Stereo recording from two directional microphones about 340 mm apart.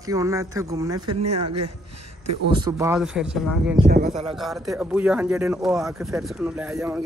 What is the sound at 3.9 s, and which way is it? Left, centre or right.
Speech, right.